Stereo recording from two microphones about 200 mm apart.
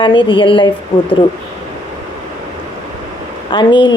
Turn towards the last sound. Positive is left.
turn(degrees=25)  # may be behind; listen again after turning